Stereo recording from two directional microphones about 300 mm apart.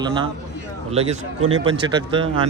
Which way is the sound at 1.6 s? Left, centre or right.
Centre.